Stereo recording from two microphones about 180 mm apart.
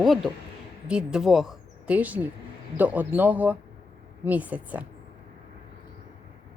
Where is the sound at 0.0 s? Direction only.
Centre (ahead or behind).